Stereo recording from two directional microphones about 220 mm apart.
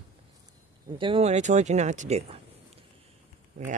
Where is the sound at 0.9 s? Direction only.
25° right (ahead or behind).